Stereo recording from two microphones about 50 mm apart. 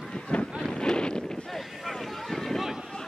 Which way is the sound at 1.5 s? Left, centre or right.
Centre.